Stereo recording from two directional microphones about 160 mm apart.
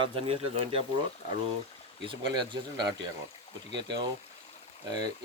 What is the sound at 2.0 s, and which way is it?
Speech, 30° right (ahead or behind).